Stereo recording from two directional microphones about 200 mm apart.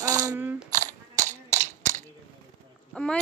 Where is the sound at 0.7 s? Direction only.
40° right (ahead or behind).